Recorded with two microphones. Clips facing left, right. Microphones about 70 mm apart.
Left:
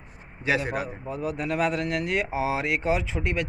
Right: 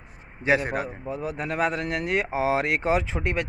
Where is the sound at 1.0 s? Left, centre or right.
Right.